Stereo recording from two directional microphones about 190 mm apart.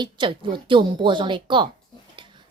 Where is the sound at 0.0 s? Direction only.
25° right (ahead or behind).